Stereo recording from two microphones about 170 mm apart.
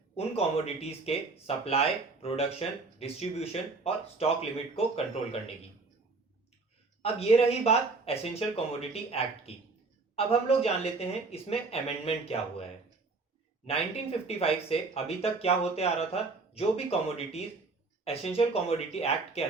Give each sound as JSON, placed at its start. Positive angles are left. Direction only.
{"t": 0.2, "sound": "speech", "side_deg": 35}
{"t": 7.0, "sound": "speech", "side_deg": 35}
{"t": 13.7, "sound": "speech", "side_deg": 35}